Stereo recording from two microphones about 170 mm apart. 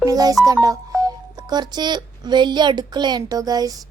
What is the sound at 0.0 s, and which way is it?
A child's voice, 20° right (ahead or behind).